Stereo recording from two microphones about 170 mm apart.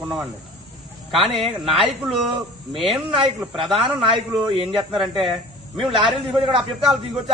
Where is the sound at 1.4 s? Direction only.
35° right (ahead or behind).